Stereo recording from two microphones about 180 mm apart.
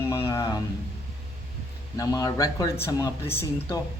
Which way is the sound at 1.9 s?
20° left (ahead or behind).